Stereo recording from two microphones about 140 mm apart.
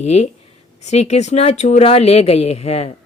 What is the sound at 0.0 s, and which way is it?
Speech, 50° left (ahead or behind).